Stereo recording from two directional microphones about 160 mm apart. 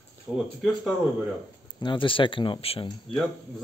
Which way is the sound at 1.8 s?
30° left (ahead or behind).